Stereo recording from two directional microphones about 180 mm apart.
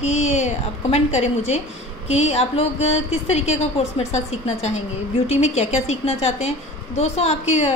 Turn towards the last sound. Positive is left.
turn(degrees=35)  # may be behind; listen again after turning